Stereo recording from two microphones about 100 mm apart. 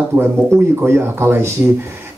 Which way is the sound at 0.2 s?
25° right (ahead or behind).